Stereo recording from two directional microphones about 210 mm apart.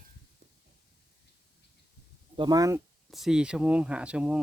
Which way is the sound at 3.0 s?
Centre (ahead or behind).